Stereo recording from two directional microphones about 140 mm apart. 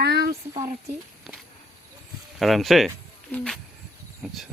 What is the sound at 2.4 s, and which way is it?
Speech, centre (ahead or behind).